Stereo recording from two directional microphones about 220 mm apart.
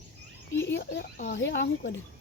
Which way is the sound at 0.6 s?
50° left (ahead or behind).